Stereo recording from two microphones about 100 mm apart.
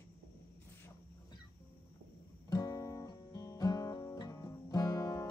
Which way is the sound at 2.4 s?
40° left (ahead or behind).